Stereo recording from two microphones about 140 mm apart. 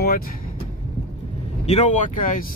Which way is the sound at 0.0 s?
90° left.